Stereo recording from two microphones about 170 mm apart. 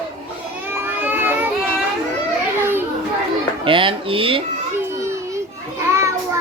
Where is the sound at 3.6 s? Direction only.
30° right (ahead or behind).